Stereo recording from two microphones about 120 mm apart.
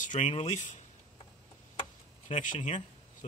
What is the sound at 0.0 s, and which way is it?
Speech, 90° left.